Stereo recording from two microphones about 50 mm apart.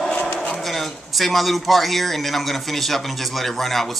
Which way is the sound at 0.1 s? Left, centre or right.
Left.